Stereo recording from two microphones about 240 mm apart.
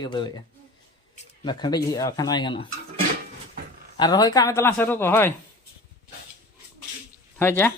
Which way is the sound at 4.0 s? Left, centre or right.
Centre.